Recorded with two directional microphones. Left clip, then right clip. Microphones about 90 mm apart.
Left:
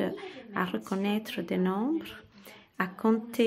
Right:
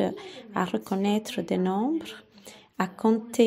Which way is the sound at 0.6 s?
35° right (ahead or behind).